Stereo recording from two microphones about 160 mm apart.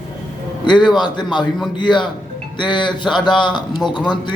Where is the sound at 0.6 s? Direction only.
30° left (ahead or behind).